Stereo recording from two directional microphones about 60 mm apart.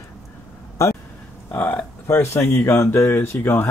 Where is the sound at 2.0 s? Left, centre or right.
Left.